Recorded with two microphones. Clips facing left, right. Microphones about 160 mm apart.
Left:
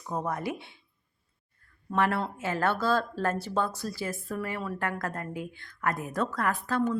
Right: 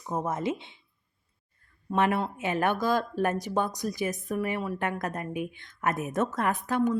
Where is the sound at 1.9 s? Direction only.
20° right (ahead or behind).